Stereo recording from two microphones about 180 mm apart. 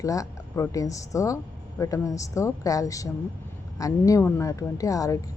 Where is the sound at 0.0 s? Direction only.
20° left (ahead or behind).